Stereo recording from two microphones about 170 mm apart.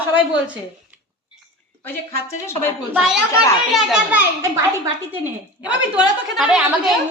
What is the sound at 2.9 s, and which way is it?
A woman's voice, 5° right (ahead or behind).